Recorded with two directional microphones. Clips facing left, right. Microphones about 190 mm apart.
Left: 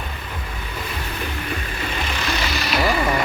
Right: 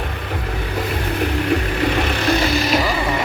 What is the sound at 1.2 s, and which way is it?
Music, 70° right (ahead or behind).